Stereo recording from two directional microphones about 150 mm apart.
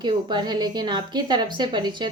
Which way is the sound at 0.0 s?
30° right (ahead or behind).